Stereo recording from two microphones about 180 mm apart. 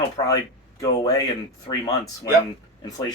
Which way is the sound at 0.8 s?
20° left (ahead or behind).